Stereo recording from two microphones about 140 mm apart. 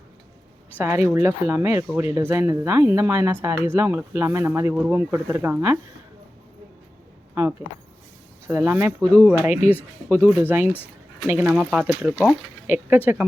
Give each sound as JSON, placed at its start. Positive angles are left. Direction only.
{"t": 0.8, "sound": "speech", "side_deg": -15}
{"t": 8.4, "sound": "speech", "side_deg": -15}